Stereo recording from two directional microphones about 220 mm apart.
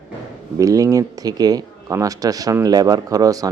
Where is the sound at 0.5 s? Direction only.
15° right (ahead or behind).